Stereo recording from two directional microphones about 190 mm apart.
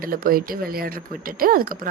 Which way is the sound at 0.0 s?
50° right (ahead or behind).